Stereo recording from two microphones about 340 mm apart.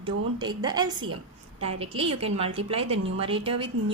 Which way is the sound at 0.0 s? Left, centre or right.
Centre.